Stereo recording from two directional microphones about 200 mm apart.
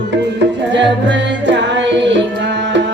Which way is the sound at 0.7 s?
65° right (ahead or behind).